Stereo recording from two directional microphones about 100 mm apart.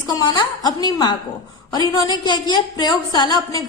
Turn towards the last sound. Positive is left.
turn(degrees=45)  # may be behind; listen again after turning